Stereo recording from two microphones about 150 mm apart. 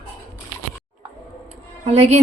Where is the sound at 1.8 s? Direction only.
45° right (ahead or behind).